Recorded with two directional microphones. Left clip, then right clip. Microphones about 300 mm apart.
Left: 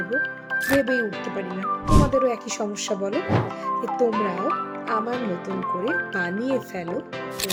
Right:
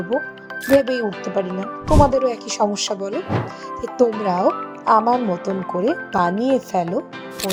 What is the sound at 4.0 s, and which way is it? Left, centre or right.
Speech, centre.